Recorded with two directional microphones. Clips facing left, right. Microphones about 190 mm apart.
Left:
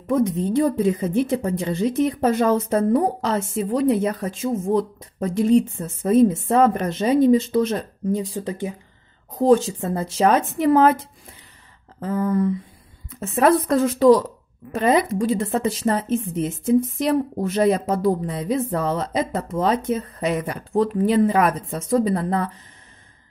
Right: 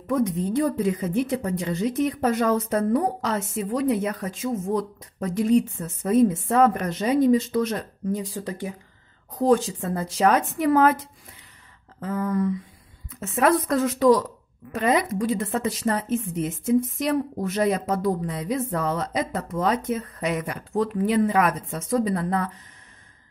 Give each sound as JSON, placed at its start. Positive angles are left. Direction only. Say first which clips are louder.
{"t": 0.0, "sound": "a woman's voice", "louder": "left 3 dB", "side_deg": 25}